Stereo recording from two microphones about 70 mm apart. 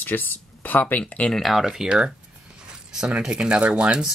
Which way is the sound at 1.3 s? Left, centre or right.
Centre.